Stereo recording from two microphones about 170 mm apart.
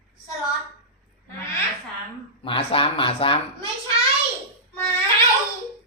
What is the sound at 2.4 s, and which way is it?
Speech, 30° left (ahead or behind).